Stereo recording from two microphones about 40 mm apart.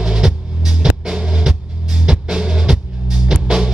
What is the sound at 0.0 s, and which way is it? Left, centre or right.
Music, centre.